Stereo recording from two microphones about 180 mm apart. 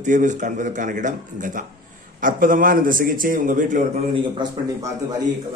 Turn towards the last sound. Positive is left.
turn(degrees=-20)  # may be behind; listen again after turning